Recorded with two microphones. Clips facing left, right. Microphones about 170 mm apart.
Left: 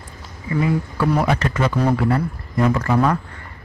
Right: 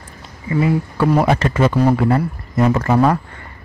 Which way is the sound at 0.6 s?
25° right (ahead or behind).